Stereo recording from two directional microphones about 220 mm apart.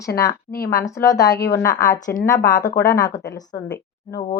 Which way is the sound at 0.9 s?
15° left (ahead or behind).